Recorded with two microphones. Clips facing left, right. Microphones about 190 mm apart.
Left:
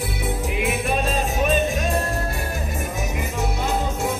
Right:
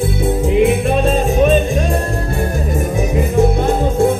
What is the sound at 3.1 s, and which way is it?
Music, 55° right (ahead or behind).